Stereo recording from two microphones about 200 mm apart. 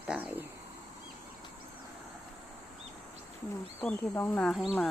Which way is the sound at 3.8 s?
5° left (ahead or behind).